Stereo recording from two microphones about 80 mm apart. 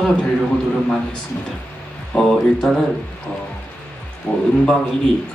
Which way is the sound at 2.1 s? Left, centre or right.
Centre.